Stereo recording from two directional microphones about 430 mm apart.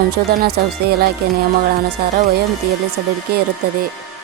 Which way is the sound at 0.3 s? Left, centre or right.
Right.